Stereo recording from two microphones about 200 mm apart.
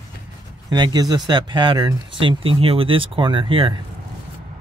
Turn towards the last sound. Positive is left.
turn(degrees=-25)  # may be behind; listen again after turning